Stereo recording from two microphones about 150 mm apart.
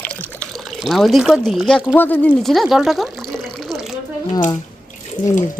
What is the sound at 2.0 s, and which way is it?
Speech, 10° left (ahead or behind).